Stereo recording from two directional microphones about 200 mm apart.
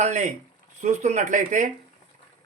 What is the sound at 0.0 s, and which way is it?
Speech, 35° right (ahead or behind).